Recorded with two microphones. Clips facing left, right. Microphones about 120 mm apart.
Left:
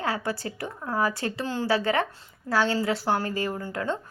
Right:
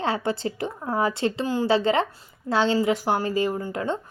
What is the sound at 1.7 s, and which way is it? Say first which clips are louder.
A woman's voice: right 3 dB; 25° right (ahead or behind).